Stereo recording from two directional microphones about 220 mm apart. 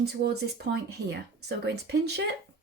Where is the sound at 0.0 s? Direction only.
50° right (ahead or behind).